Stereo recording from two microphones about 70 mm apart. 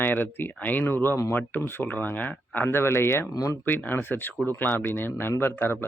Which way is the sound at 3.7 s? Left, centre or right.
Left.